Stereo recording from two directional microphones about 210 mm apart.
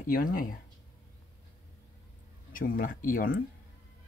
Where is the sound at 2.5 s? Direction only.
40° left (ahead or behind).